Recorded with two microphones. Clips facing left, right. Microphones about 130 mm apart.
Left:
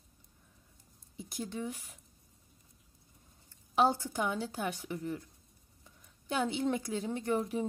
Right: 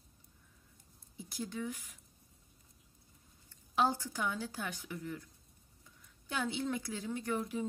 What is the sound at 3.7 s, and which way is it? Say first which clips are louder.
Speech: left 4 dB; 20° left (ahead or behind).